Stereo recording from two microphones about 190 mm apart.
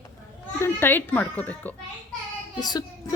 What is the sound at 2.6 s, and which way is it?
Child singing, 20° left (ahead or behind).